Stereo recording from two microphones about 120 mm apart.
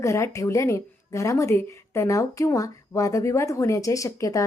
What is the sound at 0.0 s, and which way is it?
Speech, 25° left (ahead or behind).